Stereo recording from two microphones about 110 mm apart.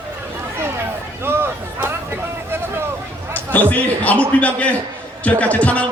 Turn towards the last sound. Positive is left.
turn(degrees=10)  # may be behind; listen again after turning